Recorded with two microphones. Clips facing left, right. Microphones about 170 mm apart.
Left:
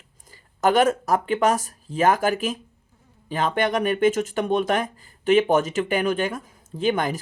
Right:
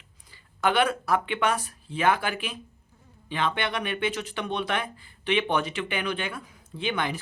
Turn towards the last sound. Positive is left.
turn(degrees=40)  # may be behind; listen again after turning